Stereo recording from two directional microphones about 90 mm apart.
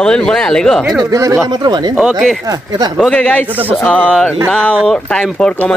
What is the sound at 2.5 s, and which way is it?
Speech, 50° right (ahead or behind).